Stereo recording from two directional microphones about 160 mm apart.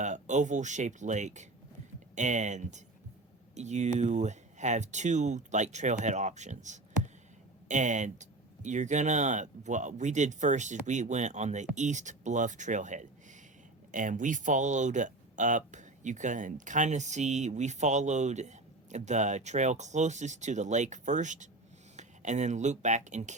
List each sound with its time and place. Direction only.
0.0 s speech: 50° right (ahead or behind)